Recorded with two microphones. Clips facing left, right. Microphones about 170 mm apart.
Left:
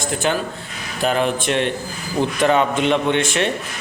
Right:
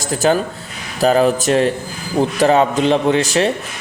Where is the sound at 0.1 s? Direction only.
35° right (ahead or behind).